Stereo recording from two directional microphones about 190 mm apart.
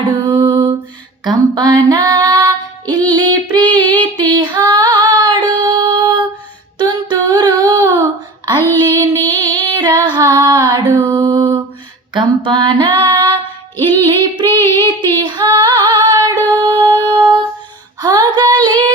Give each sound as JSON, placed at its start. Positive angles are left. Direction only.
{"t": 0.0, "sound": "music", "side_deg": -25}
{"t": 1.2, "sound": "female singing", "side_deg": -20}